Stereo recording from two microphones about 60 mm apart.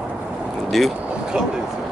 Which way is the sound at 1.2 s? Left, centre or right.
Centre.